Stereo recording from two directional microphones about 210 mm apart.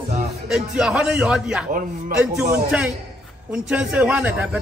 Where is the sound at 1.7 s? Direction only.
40° right (ahead or behind).